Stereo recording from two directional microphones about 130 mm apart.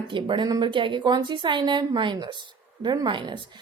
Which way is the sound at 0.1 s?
40° right (ahead or behind).